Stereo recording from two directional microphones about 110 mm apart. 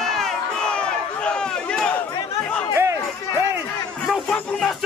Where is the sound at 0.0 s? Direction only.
5° left (ahead or behind).